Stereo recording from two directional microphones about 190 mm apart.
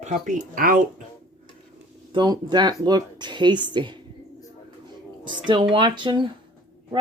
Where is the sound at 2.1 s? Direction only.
20° right (ahead or behind).